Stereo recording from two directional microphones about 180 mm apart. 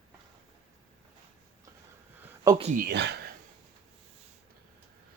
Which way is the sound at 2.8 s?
65° right (ahead or behind).